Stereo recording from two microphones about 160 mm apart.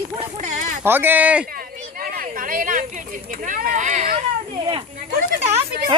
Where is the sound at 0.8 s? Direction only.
15° right (ahead or behind).